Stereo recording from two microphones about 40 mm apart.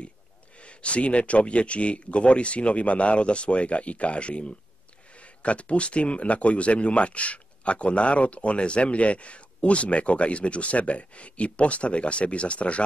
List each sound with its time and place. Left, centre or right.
0.6 s speech: left